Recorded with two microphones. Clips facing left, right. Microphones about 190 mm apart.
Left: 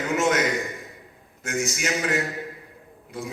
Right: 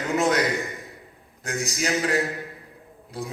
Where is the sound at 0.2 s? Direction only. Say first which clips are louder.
Right 1 dB; 35° right (ahead or behind).